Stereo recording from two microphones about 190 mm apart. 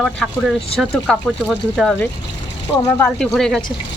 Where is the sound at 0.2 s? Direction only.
Centre (ahead or behind).